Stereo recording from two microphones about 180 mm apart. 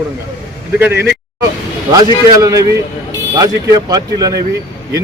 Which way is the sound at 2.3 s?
20° right (ahead or behind).